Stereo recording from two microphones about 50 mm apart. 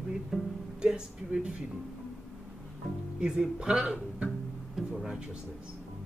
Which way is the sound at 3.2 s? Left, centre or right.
Centre.